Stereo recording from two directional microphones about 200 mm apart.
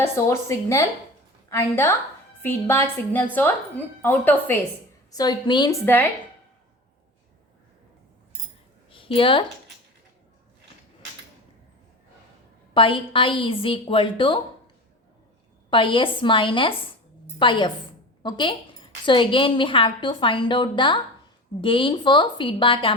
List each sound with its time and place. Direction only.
0.0 s a woman's voice: 15° left (ahead or behind)
5.1 s a woman's voice: 20° left (ahead or behind)
5.8 s a woman's voice: 10° left (ahead or behind)
8.9 s a woman's voice: 25° left (ahead or behind)
12.7 s a woman's voice: 25° left (ahead or behind)
15.7 s a woman's voice: 25° left (ahead or behind)